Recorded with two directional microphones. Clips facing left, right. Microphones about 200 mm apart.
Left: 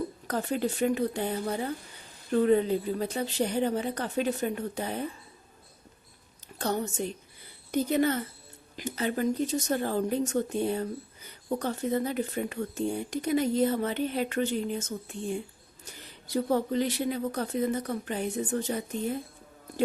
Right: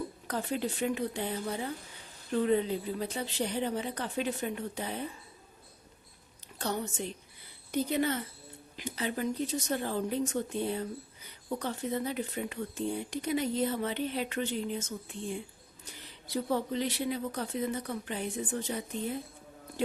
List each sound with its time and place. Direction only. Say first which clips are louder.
0.3 s speech: left 4 dB; 45° left (ahead or behind)
6.6 s speech: left 4 dB; 45° left (ahead or behind)
16.3 s speech: left 5 dB; 45° left (ahead or behind)